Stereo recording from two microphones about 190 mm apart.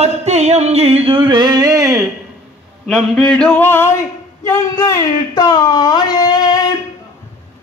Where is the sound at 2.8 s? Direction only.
5° left (ahead or behind).